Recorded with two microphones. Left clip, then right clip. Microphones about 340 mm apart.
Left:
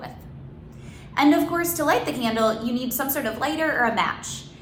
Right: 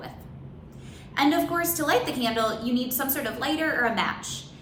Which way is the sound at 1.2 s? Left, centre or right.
Centre.